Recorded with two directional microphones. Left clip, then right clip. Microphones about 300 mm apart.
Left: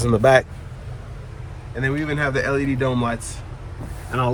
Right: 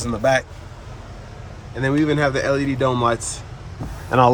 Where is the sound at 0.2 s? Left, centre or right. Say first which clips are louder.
Left 3 dB; centre.